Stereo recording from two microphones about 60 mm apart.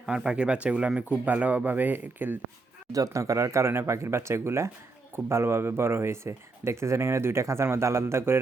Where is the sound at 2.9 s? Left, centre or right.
Right.